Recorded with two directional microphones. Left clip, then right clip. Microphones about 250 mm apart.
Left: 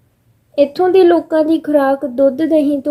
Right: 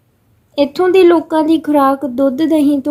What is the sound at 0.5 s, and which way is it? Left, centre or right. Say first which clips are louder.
Speech: even; right.